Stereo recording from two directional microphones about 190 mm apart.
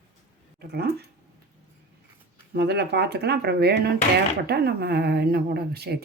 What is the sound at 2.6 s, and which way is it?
Speech, 60° right (ahead or behind).